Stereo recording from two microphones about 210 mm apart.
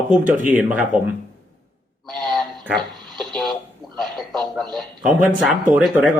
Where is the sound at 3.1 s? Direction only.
Centre (ahead or behind).